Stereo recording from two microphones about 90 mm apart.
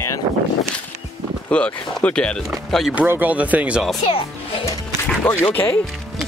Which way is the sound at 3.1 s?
20° right (ahead or behind).